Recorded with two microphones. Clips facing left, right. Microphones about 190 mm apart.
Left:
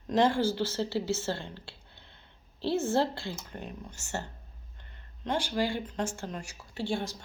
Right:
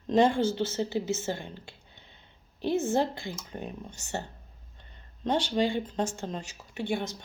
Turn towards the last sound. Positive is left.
turn(degrees=-20)  # may be behind; listen again after turning